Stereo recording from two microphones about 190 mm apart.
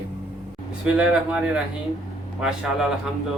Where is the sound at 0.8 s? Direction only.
5° right (ahead or behind).